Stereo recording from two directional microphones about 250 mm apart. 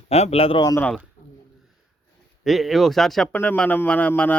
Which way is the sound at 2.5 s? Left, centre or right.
Centre.